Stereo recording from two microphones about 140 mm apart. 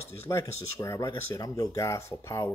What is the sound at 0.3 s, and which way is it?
Speech, 20° left (ahead or behind).